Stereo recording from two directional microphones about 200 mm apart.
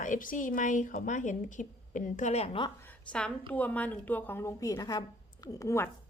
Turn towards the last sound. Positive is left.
turn(degrees=15)  # may be behind; listen again after turning